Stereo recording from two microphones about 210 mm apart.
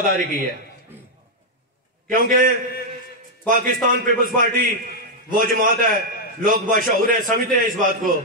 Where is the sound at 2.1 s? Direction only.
40° right (ahead or behind).